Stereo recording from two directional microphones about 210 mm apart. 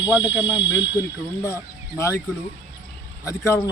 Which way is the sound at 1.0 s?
15° left (ahead or behind).